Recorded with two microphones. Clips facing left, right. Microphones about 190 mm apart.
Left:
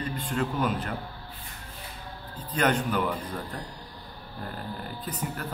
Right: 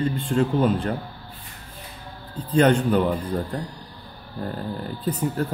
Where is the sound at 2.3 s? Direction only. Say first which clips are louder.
Right 8 dB; 30° right (ahead or behind).